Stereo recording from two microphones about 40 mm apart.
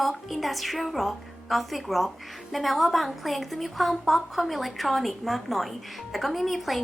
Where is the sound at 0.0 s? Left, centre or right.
Centre.